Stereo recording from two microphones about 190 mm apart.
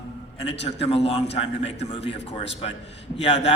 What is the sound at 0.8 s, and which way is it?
Speech, 30° left (ahead or behind).